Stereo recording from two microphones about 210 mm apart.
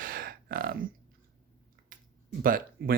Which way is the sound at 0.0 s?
45° right (ahead or behind).